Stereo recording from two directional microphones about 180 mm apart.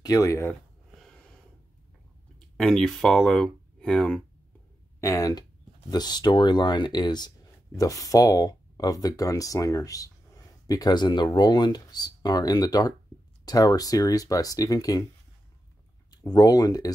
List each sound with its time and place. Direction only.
0.0 s speech: 20° left (ahead or behind)
0.9 s a sound: 5° left (ahead or behind)
2.3 s speech: 5° left (ahead or behind)
5.0 s speech: 20° left (ahead or behind)
16.1 s speech: 20° left (ahead or behind)